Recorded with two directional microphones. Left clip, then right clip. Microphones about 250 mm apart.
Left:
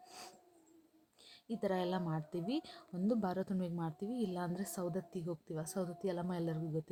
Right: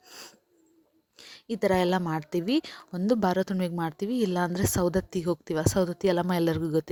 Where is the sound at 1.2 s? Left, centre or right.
Right.